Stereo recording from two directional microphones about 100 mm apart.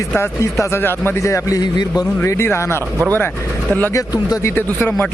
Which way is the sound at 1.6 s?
45° left (ahead or behind).